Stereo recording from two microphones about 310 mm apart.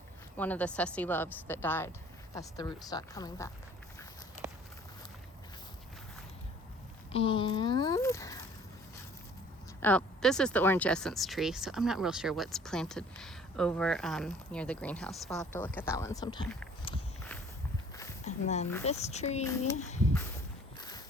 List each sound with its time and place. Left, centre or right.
0.3 s speech: centre
7.1 s speech: centre
9.8 s speech: centre
18.3 s speech: left
19.5 s speech: centre
19.7 s speech: left